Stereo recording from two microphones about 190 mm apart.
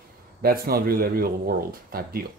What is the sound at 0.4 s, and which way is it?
Speech, 50° right (ahead or behind).